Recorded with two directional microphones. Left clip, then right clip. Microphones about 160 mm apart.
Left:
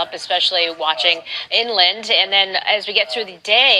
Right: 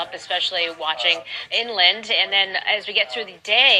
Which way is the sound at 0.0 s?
35° left (ahead or behind).